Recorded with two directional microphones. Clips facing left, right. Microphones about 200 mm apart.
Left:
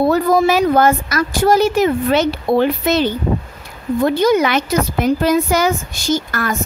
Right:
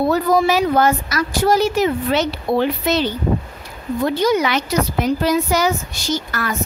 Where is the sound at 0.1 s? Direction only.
50° left (ahead or behind).